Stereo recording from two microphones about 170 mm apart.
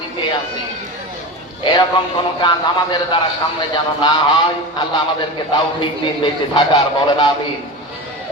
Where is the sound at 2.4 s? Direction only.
30° left (ahead or behind).